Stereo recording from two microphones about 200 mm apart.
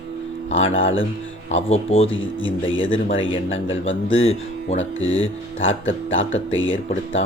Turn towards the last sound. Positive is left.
turn(degrees=75)  # may be behind; listen again after turning